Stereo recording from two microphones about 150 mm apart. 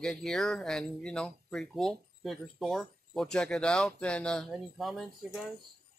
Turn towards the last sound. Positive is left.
turn(degrees=0)  # may be behind; listen again after turning